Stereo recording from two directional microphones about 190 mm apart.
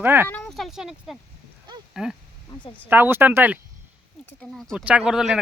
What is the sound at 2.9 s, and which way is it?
Speech, 10° right (ahead or behind).